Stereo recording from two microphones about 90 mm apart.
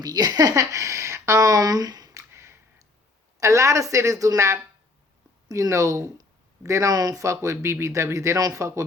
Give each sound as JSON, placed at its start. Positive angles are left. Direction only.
{"t": 0.0, "sound": "speech", "side_deg": -45}